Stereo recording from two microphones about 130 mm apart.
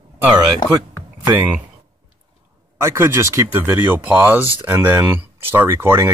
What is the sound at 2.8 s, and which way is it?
Speech, 20° right (ahead or behind).